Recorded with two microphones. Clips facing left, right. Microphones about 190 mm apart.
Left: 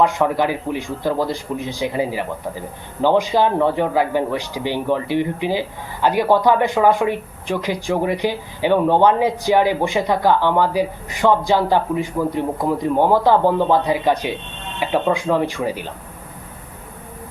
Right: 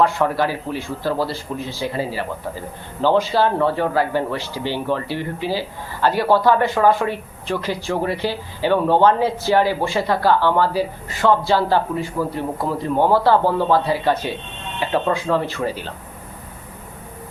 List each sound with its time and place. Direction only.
0.0 s a man's voice: 15° left (ahead or behind)